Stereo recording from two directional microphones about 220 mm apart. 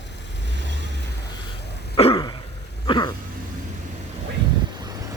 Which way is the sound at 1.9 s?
25° left (ahead or behind).